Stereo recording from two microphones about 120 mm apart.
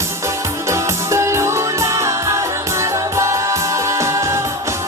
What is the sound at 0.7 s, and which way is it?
Music, 25° right (ahead or behind).